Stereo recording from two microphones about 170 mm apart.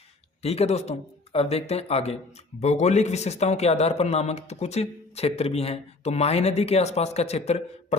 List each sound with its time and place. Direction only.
0.4 s speech: 35° left (ahead or behind)